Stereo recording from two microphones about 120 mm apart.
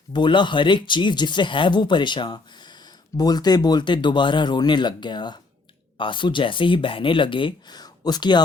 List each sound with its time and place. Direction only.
0.1 s speech: 40° left (ahead or behind)